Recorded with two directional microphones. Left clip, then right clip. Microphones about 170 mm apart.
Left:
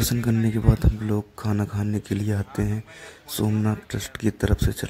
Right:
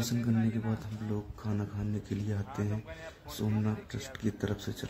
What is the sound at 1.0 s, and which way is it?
Speech, 50° left (ahead or behind).